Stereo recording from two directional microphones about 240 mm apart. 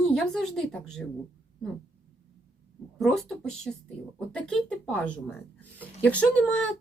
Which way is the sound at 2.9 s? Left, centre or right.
Centre.